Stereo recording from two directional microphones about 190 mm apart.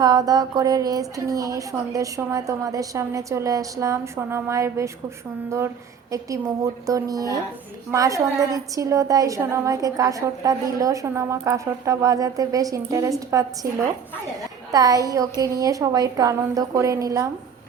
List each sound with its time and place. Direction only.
0.0 s a woman's voice: 20° right (ahead or behind)
14.7 s a woman's voice: 20° right (ahead or behind)